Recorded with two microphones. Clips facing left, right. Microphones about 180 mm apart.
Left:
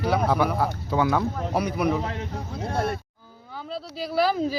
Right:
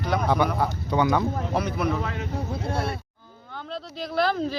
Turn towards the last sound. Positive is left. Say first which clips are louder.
# left 1 dB
turn(degrees=10)  # may be behind; listen again after turning